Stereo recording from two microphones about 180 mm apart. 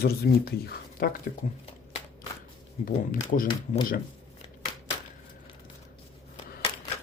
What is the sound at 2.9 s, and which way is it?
Speech, 50° left (ahead or behind).